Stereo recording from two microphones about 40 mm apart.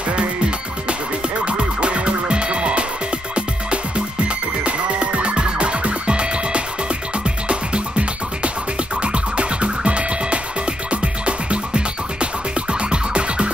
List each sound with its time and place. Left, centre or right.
1.4 s music: right
9.0 s music: right